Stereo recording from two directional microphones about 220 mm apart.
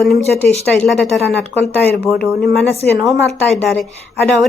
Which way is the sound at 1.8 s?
45° left (ahead or behind).